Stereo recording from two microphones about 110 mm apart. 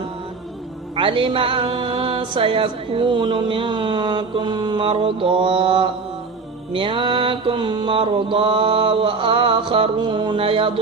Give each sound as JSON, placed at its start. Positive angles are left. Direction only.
{"t": 0.9, "sound": "music", "side_deg": -50}